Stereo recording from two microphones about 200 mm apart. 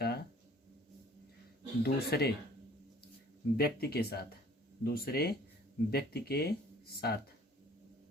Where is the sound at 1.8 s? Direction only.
50° left (ahead or behind).